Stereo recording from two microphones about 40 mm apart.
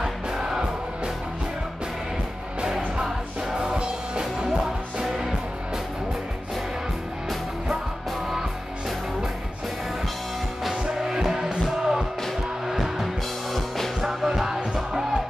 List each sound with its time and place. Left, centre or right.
0.0 s music: centre
2.6 s music: centre
5.0 s music: centre
10.6 s music: centre
14.0 s music: centre